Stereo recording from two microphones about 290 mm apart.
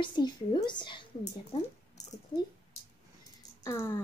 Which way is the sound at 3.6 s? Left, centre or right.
Centre.